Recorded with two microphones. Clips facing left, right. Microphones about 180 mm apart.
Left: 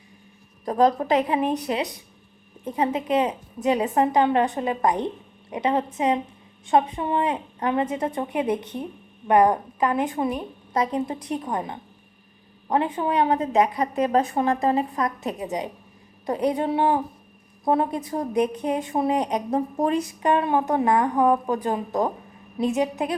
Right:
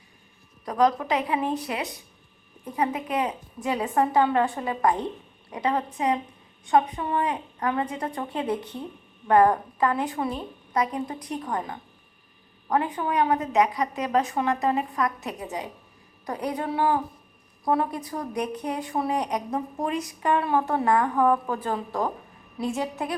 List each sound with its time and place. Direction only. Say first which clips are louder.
0.6 s a woman's voice: left 3 dB; 30° left (ahead or behind)
1.0 s a woman's voice: left 4 dB; 40° left (ahead or behind)
1.4 s a woman's voice: left 3 dB; 20° left (ahead or behind)
2.6 s a woman's voice: left 4 dB; 20° left (ahead or behind)
20.2 s a woman's voice: left 2 dB; 20° left (ahead or behind)